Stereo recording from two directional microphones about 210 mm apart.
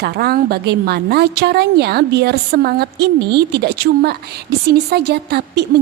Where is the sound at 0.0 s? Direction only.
50° right (ahead or behind).